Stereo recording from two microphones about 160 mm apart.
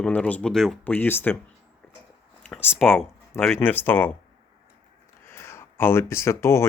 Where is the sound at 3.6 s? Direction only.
10° left (ahead or behind).